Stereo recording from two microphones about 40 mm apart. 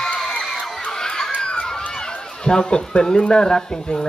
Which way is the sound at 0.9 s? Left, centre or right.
Centre.